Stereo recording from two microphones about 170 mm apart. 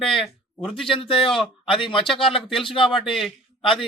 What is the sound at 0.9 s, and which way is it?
Speech, 30° left (ahead or behind).